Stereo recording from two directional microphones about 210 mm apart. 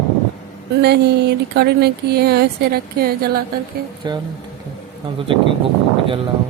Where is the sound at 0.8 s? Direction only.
50° right (ahead or behind).